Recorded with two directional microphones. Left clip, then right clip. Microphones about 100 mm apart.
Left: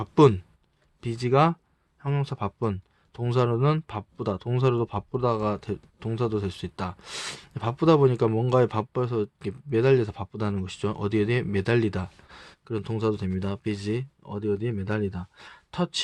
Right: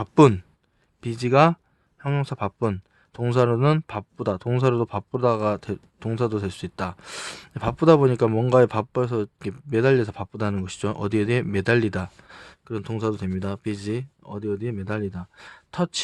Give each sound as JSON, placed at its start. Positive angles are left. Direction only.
{"t": 0.0, "sound": "speech", "side_deg": -40}
{"t": 7.3, "sound": "speech", "side_deg": -35}